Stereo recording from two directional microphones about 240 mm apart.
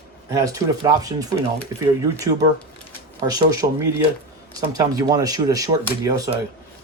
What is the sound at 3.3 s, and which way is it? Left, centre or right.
Speech, centre.